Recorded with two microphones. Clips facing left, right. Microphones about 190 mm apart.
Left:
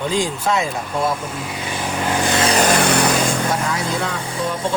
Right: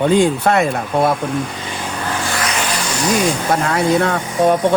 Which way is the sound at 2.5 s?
40° left (ahead or behind).